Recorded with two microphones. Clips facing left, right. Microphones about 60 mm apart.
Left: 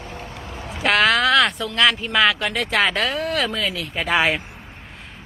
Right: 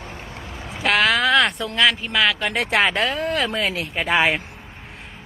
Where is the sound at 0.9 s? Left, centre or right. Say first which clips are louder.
Left 1 dB; centre.